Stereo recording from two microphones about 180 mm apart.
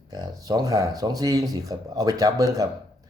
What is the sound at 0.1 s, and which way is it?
Speech, 20° right (ahead or behind).